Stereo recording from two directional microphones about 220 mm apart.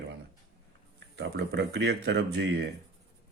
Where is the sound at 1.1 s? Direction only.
50° right (ahead or behind).